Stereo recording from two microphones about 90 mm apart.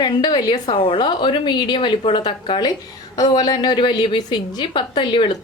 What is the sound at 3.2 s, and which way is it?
A woman's voice, 50° left (ahead or behind).